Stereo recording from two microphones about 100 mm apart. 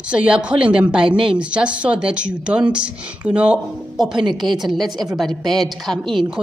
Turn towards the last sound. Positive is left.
turn(degrees=5)  # may be behind; listen again after turning